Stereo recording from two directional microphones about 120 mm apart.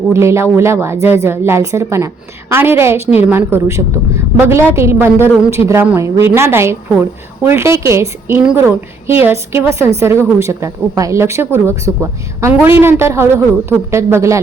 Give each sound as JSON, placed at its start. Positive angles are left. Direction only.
{"t": 0.1, "sound": "speech", "side_deg": -25}